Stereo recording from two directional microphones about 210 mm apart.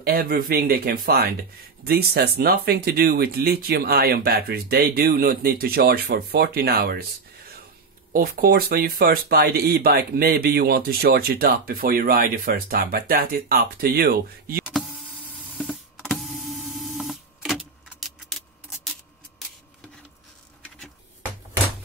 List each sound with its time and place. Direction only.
0.0 s speech: 45° right (ahead or behind)
8.1 s speech: 45° right (ahead or behind)
14.6 s power windows: centre (ahead or behind)
17.8 s keys jangling: centre (ahead or behind)